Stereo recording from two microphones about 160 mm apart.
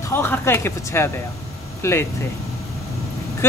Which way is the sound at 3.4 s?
15° left (ahead or behind).